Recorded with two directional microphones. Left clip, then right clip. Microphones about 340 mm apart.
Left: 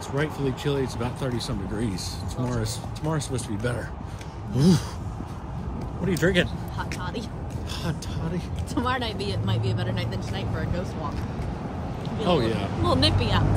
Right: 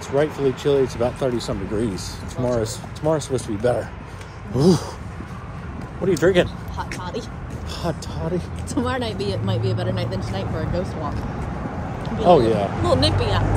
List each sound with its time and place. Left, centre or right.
0.2 s speech: centre
6.0 s speech: centre
6.8 s speech: centre
8.7 s speech: centre
12.3 s speech: centre
12.8 s speech: centre